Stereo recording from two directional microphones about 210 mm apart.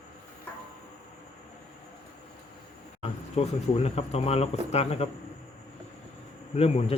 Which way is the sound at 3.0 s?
30° left (ahead or behind).